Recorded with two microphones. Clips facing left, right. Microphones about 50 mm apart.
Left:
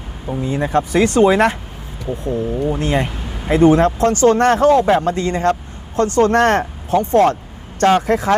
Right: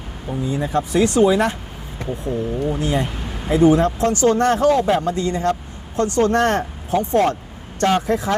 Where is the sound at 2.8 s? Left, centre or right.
Left.